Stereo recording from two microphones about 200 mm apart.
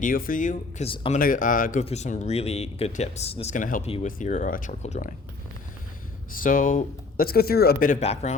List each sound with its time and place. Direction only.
0.0 s speech: 45° left (ahead or behind)
0.9 s speech: 25° left (ahead or behind)
1.2 s speech: 40° left (ahead or behind)
6.4 s speech: 45° left (ahead or behind)